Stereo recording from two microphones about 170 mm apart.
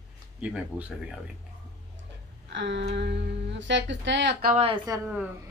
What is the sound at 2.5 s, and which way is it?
Speech, 90° right.